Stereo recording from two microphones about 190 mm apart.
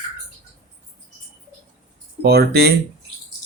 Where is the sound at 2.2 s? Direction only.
55° right (ahead or behind).